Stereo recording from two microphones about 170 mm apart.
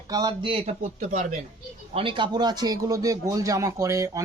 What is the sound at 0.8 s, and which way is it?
Speech, 45° right (ahead or behind).